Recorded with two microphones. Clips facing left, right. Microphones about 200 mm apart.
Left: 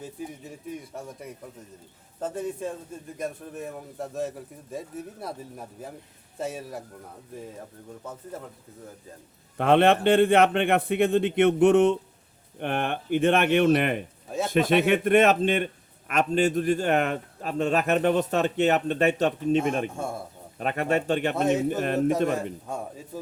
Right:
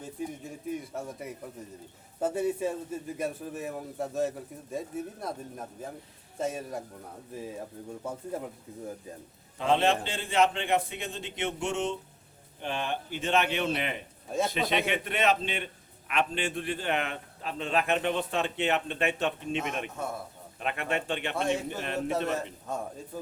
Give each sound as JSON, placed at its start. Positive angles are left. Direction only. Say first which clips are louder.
{"t": 0.0, "sound": "a man's voice", "louder": "even", "side_deg": 5}
{"t": 8.0, "sound": "speech", "louder": "right 3 dB", "side_deg": -10}
{"t": 9.6, "sound": "a man's voice", "louder": "left 6 dB", "side_deg": 60}
{"t": 14.3, "sound": "a man's voice", "louder": "even", "side_deg": 0}
{"t": 14.5, "sound": "a man's voice", "louder": "left 8 dB", "side_deg": 50}
{"t": 20.6, "sound": "speech", "louder": "left 6 dB", "side_deg": 40}